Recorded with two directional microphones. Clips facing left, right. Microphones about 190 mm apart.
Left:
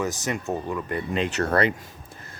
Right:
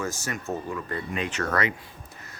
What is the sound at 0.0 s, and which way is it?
Speech, 20° left (ahead or behind).